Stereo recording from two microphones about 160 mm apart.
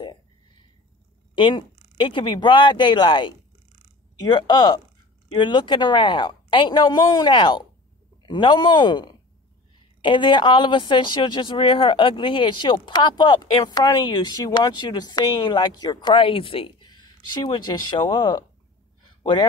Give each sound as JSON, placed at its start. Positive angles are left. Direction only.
{"t": 1.3, "sound": "speech", "side_deg": 30}